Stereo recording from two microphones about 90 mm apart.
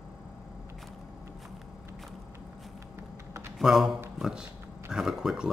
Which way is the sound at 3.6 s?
5° right (ahead or behind).